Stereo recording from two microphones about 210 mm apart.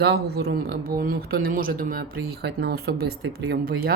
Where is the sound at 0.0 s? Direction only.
50° right (ahead or behind).